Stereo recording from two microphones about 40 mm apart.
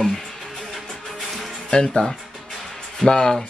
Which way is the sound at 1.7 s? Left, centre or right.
Centre.